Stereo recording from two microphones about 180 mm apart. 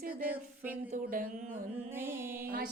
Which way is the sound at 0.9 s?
50° right (ahead or behind).